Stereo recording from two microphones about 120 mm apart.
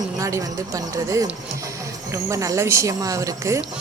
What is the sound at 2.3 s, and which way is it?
Speech, 25° right (ahead or behind).